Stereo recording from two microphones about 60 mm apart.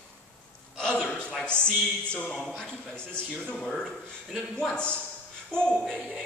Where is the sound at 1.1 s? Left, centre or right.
Centre.